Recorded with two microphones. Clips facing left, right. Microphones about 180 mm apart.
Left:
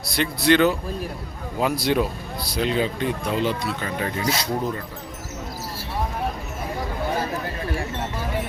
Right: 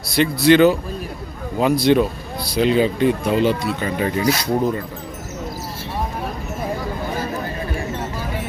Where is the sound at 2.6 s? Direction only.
5° right (ahead or behind).